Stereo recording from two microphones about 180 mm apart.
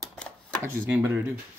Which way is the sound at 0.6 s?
15° right (ahead or behind).